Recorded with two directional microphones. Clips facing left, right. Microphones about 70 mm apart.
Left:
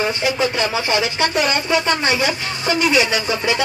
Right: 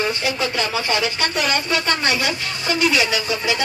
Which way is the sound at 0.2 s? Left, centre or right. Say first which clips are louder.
Left 3 dB; centre.